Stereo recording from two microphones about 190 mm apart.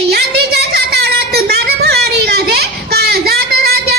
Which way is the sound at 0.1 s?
55° right (ahead or behind).